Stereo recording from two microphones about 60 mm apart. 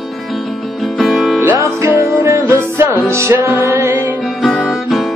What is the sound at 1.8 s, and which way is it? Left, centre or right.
Music, right.